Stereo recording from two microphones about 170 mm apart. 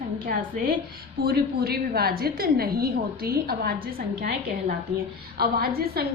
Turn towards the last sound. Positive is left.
turn(degrees=-65)  # may be behind; listen again after turning